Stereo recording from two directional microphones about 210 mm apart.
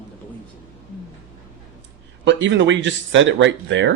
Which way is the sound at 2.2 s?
60° right (ahead or behind).